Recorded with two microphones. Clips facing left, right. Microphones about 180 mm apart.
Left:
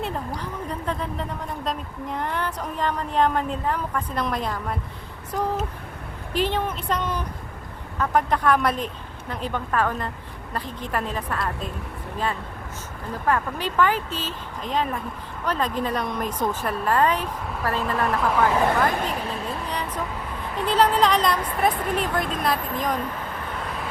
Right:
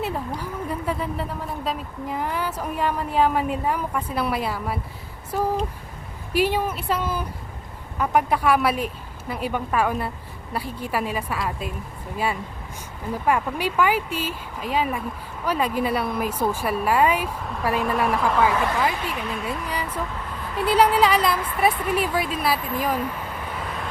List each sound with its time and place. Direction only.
0.3 s a woman's voice: 10° right (ahead or behind)
6.3 s a woman's voice: 10° right (ahead or behind)
18.8 s a woman's voice: 50° left (ahead or behind)
19.2 s speech: 35° left (ahead or behind)
20.6 s a woman's voice: 10° right (ahead or behind)
23.6 s vehicle: centre (ahead or behind)